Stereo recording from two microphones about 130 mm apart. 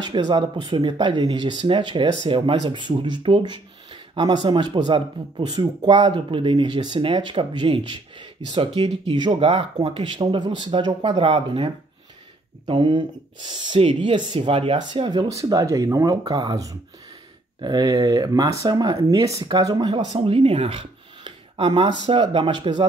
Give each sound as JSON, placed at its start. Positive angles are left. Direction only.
{"t": 0.0, "sound": "speech", "side_deg": -35}
{"t": 15.3, "sound": "speech", "side_deg": -25}
{"t": 20.2, "sound": "speech", "side_deg": -45}